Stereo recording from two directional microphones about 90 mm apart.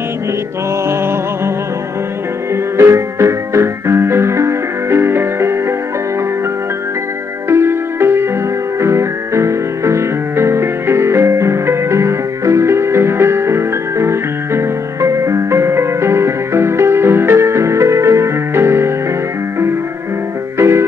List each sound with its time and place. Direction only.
2.5 s music: 30° right (ahead or behind)
7.4 s music: 25° right (ahead or behind)
20.5 s music: 30° right (ahead or behind)